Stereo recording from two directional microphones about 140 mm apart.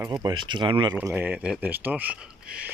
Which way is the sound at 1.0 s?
15° right (ahead or behind).